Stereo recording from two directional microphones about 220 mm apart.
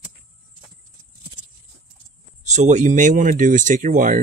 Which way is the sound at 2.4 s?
30° right (ahead or behind).